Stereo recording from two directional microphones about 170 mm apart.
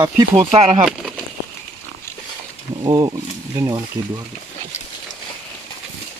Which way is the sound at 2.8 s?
25° right (ahead or behind).